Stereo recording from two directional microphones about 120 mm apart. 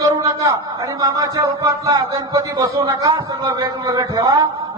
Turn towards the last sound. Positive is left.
turn(degrees=-35)  # may be behind; listen again after turning